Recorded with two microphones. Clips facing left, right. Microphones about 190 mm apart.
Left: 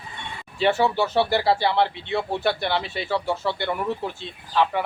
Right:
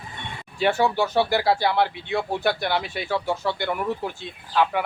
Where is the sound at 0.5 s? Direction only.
5° right (ahead or behind).